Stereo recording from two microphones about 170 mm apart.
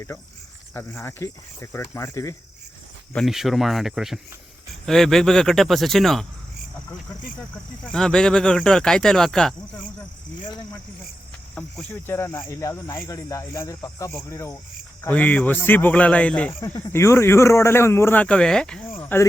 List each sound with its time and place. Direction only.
0.7 s a man's voice: 15° left (ahead or behind)
3.1 s speech: centre (ahead or behind)
7.9 s speech: 5° left (ahead or behind)
11.5 s a man's voice: 10° left (ahead or behind)